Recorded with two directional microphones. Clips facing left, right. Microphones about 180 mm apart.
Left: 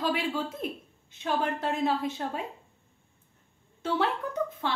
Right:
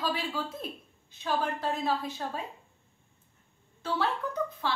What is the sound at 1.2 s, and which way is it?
A woman's voice, 20° left (ahead or behind).